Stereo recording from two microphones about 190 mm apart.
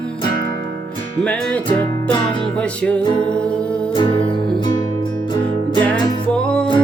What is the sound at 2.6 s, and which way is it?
Music, 5° left (ahead or behind).